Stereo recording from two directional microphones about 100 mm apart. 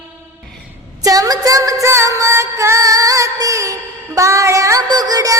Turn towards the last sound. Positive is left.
turn(degrees=-40)  # may be behind; listen again after turning